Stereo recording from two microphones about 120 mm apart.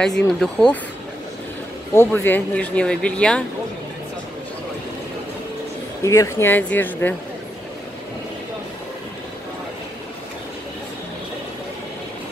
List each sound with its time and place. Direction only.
0.0 s speech: 5° left (ahead or behind)
2.0 s speech: 20° left (ahead or behind)
6.0 s speech: 25° left (ahead or behind)